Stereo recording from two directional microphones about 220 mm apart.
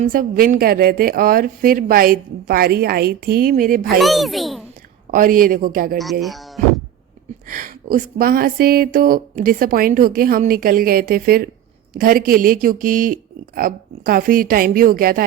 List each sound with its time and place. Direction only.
0.0 s speech: 40° right (ahead or behind)
4.0 s a child's voice: centre (ahead or behind)
5.1 s speech: 40° right (ahead or behind)
6.0 s a child's voice: centre (ahead or behind)
7.4 s speech: 40° right (ahead or behind)